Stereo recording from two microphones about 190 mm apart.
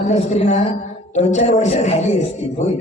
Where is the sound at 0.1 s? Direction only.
35° left (ahead or behind).